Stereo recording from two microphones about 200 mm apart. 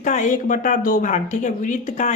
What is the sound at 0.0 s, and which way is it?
Speech, 40° left (ahead or behind).